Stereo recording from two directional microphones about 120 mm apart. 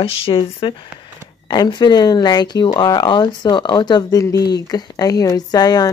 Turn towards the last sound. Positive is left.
turn(degrees=35)  # may be behind; listen again after turning